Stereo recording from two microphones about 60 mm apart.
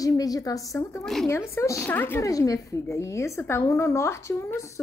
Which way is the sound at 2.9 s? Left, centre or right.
Left.